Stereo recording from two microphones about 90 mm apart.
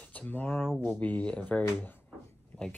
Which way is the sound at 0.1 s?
20° left (ahead or behind).